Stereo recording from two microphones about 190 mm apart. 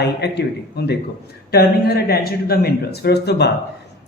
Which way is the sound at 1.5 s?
55° left (ahead or behind).